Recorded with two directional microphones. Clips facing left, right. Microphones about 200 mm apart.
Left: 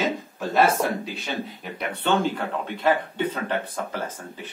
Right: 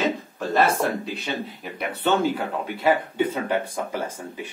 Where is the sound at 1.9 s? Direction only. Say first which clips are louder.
Right 1 dB; 5° right (ahead or behind).